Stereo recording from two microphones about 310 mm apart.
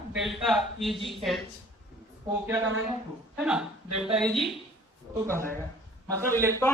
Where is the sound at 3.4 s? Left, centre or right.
Centre.